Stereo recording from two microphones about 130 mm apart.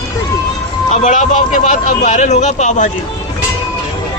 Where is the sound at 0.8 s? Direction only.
65° left (ahead or behind).